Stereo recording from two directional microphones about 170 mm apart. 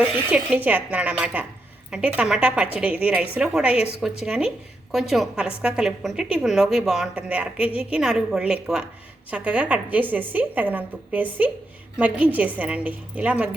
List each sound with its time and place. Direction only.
0.0 s a woman's voice: 10° right (ahead or behind)